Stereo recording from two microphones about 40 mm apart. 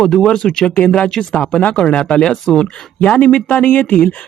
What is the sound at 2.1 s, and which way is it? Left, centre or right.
Speech, centre.